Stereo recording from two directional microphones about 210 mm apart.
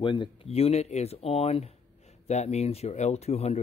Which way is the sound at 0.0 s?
25° left (ahead or behind).